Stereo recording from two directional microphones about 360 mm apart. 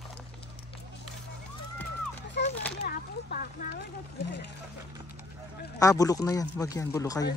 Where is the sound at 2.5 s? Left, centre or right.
Centre.